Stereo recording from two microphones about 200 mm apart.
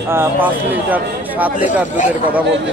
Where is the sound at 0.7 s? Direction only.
10° right (ahead or behind).